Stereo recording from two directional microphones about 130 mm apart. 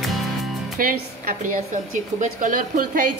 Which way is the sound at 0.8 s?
90° right.